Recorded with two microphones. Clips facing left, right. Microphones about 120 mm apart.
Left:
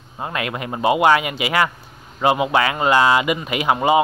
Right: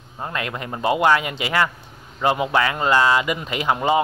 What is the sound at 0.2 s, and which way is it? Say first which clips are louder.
Speech: left 2 dB; 15° left (ahead or behind).